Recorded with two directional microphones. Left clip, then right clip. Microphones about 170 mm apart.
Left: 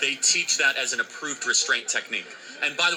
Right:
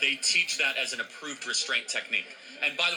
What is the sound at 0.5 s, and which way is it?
Speech, 35° left (ahead or behind).